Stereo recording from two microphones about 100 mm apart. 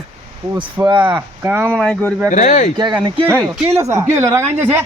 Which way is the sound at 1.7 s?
10° left (ahead or behind).